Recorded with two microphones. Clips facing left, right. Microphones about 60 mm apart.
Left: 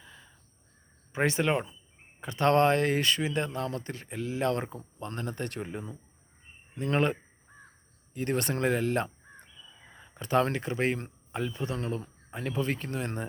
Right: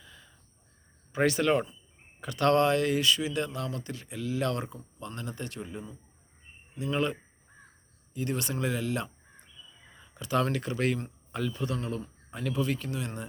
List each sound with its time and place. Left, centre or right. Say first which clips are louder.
0.0 s crow: left 1 dB; left
1.1 s speech: right 2 dB; left